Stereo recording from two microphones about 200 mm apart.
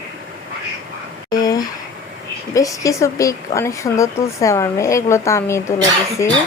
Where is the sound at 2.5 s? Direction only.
15° left (ahead or behind).